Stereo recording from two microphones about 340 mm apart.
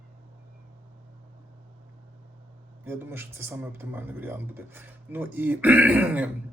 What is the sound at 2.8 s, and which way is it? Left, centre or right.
Speech, centre.